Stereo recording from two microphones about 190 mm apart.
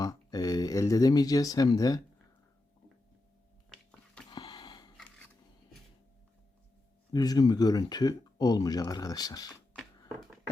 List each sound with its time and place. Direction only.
0.0 s speech: 20° left (ahead or behind)
4.3 s a sound: 25° left (ahead or behind)
7.1 s speech: 20° left (ahead or behind)